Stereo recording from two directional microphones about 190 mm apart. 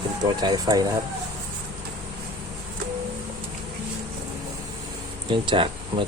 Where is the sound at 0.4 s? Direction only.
20° right (ahead or behind).